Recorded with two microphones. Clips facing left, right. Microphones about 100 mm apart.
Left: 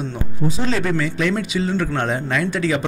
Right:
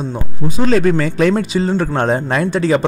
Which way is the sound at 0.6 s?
50° right (ahead or behind).